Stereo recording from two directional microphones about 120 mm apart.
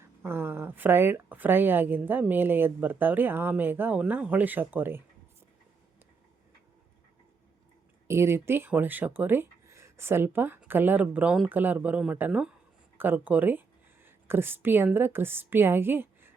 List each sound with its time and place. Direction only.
0.0 s speech: 20° right (ahead or behind)
8.0 s speech: 20° right (ahead or behind)